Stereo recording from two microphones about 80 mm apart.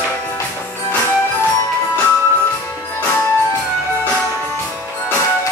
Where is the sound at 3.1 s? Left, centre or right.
Centre.